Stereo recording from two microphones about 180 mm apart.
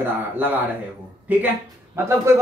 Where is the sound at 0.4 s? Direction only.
10° right (ahead or behind).